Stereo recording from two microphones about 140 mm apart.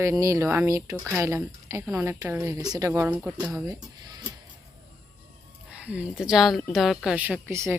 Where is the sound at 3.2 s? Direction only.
10° right (ahead or behind).